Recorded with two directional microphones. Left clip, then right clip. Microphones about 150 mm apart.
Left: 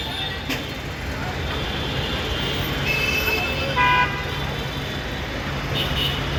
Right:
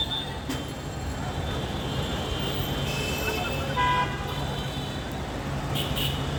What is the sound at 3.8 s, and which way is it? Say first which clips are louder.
Vehicle: left 7 dB; 30° right (ahead or behind).